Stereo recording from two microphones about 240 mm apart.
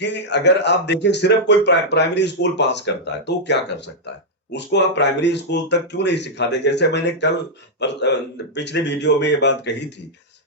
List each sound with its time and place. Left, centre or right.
0.0 s speech: left
8.5 s speech: left